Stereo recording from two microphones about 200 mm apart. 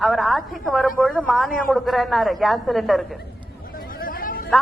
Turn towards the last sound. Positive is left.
turn(degrees=45)  # may be behind; listen again after turning